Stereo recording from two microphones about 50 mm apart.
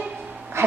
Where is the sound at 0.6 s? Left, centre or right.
Right.